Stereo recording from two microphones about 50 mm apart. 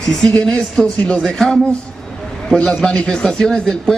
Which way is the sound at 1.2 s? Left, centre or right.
Centre.